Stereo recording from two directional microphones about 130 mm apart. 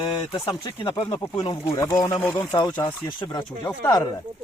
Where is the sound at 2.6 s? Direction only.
35° left (ahead or behind).